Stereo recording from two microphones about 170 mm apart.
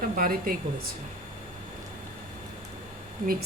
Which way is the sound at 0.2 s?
55° right (ahead or behind).